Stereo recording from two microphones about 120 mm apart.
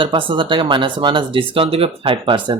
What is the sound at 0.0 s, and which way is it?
Speech, 45° right (ahead or behind).